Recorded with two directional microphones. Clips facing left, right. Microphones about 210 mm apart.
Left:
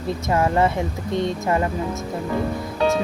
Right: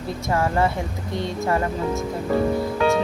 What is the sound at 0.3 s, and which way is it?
Speech, 20° left (ahead or behind).